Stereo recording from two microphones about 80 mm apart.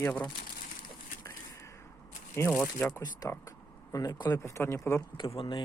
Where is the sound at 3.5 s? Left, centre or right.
Left.